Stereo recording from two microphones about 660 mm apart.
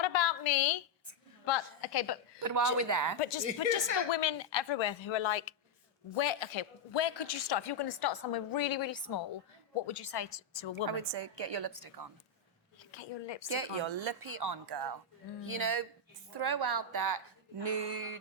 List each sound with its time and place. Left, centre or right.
0.0 s a sound: left
2.4 s speech: right
3.2 s a woman's voice: left
10.9 s speech: right
12.9 s a woman's voice: left
13.6 s speech: right
16.3 s speech: right
17.6 s a sound: right